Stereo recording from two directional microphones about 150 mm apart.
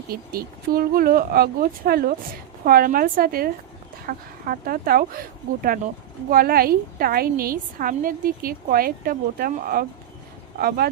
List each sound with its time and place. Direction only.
0.1 s speech: 80° right
2.6 s a woman's voice: 75° right (ahead or behind)
6.3 s a woman's voice: 80° right
10.6 s speech: 90° right